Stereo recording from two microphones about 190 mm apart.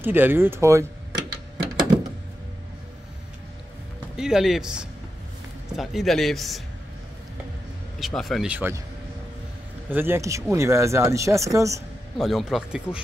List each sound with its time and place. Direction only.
0.0 s speech: 10° right (ahead or behind)
4.2 s speech: 5° right (ahead or behind)
8.0 s speech: centre (ahead or behind)
9.8 s speech: 10° right (ahead or behind)
12.2 s speech: centre (ahead or behind)